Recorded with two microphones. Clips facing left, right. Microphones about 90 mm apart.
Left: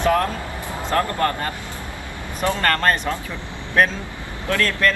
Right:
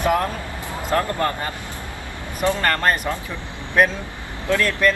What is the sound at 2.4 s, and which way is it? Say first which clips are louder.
Speech: even; 15° right (ahead or behind).